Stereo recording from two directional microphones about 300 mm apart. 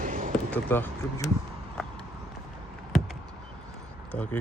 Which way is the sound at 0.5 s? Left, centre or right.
Centre.